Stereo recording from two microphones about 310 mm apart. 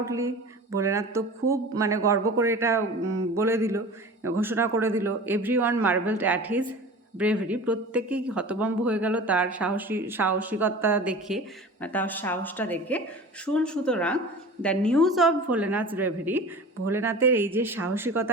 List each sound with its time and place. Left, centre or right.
0.0 s speech: centre